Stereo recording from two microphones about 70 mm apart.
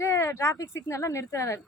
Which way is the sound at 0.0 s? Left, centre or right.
Left.